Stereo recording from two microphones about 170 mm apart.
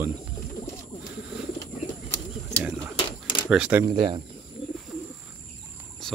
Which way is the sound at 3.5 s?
10° right (ahead or behind).